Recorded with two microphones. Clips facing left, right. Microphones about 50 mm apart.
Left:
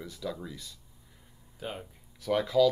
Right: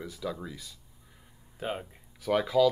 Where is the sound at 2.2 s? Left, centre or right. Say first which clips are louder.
Even; centre.